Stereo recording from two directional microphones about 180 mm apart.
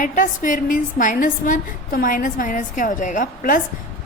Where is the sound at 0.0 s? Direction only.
45° left (ahead or behind).